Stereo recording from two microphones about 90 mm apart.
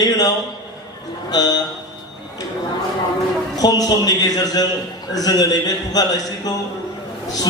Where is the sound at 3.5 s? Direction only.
45° left (ahead or behind).